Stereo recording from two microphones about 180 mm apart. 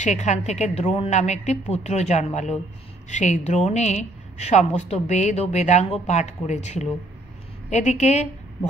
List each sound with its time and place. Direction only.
0.0 s a woman's voice: 40° left (ahead or behind)